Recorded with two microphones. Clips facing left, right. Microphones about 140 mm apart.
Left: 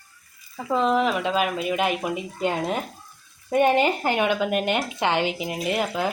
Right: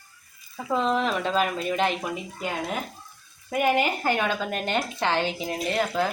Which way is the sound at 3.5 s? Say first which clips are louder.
Left 4 dB; 25° left (ahead or behind).